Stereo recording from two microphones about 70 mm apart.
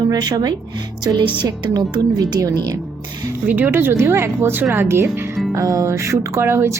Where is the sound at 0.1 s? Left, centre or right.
Right.